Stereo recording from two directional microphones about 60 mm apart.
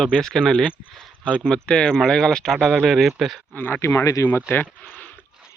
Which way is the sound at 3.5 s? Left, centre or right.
Left.